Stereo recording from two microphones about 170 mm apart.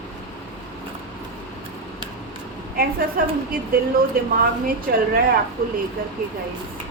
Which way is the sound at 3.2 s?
60° right (ahead or behind).